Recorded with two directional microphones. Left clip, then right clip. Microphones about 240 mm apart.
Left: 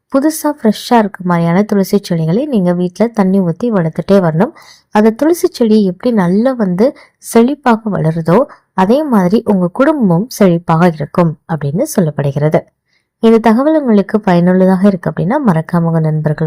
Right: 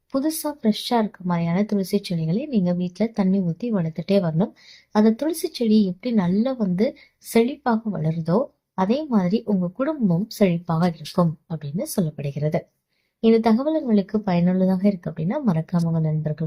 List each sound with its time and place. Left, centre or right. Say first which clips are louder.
0.1 s speech: left 12 dB; left